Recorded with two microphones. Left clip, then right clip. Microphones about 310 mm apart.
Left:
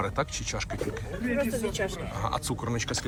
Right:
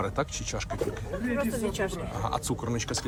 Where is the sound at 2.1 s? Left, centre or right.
Centre.